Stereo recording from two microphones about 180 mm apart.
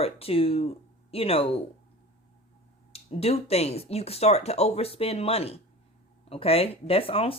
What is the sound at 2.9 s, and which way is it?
Speech, 35° left (ahead or behind).